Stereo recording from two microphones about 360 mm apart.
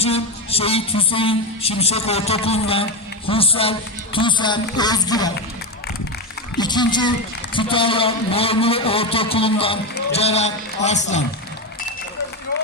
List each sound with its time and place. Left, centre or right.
0.0 s a man's voice: centre
6.6 s a man's voice: centre